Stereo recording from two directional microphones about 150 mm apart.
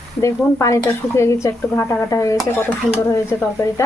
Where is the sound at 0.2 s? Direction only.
20° left (ahead or behind).